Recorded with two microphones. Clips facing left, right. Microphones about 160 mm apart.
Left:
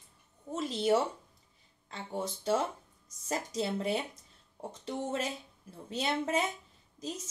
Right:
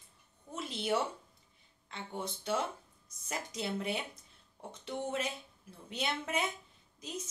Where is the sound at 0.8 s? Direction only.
40° left (ahead or behind).